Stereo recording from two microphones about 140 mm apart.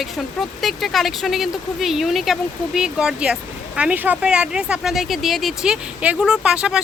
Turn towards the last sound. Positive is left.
turn(degrees=-5)  # may be behind; listen again after turning